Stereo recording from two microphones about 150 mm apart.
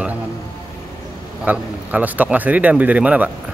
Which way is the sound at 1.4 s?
10° right (ahead or behind).